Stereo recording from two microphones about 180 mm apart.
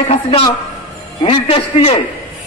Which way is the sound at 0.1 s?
30° left (ahead or behind).